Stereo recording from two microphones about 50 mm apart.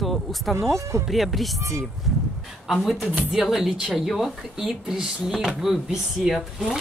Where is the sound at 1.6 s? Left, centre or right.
Right.